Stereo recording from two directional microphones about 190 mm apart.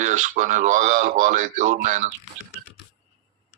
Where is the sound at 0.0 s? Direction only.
40° right (ahead or behind).